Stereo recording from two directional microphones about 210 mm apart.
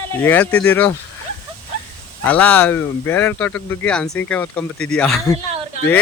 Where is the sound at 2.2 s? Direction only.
5° left (ahead or behind).